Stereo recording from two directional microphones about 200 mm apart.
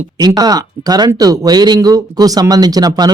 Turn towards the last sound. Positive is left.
turn(degrees=-20)  # may be behind; listen again after turning